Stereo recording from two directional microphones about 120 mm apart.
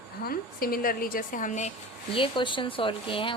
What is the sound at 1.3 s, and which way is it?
Speech, 85° left.